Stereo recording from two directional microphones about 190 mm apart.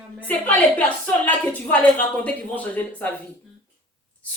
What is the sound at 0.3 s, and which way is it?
A woman's voice, 10° left (ahead or behind).